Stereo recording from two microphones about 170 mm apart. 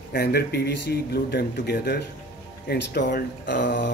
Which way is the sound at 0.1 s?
70° left (ahead or behind).